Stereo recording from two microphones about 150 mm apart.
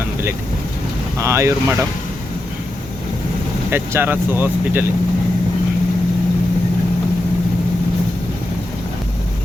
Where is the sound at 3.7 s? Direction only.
15° right (ahead or behind).